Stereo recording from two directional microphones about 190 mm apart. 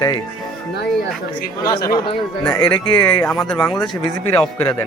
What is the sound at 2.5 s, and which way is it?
Speech, 20° left (ahead or behind).